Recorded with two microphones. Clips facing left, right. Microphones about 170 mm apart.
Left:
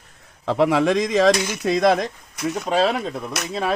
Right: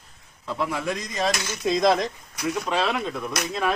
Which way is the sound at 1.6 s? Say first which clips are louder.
Left 2 dB; 65° left (ahead or behind).